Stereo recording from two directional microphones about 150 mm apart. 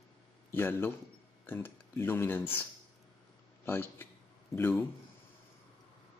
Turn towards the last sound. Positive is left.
turn(degrees=15)  # may be behind; listen again after turning